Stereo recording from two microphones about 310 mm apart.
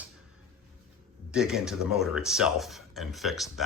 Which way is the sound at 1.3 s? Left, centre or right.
Centre.